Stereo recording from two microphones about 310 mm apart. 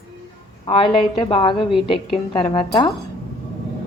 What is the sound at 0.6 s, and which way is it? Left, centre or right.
A woman's voice, centre.